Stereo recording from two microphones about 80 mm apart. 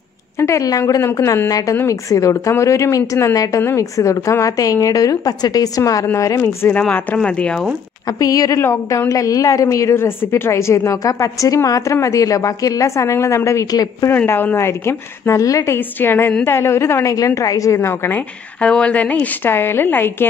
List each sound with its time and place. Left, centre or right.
0.4 s a woman's voice: left
7.2 s speech: centre
8.2 s a woman's voice: left
14.1 s a woman's voice: left
18.6 s a woman's voice: centre